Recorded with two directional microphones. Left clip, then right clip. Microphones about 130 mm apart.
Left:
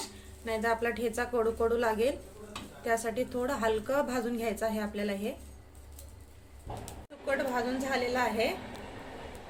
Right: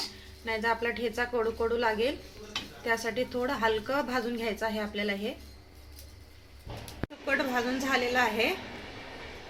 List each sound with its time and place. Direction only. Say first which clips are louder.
0.4 s a woman's voice: right 1 dB; 25° right (ahead or behind)
7.3 s a woman's voice: right 2 dB; 45° right (ahead or behind)